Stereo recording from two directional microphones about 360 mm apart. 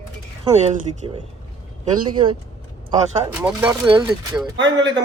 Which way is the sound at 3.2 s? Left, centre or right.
Centre.